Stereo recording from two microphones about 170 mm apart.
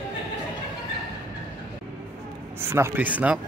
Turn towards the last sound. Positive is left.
turn(degrees=-10)  # may be behind; listen again after turning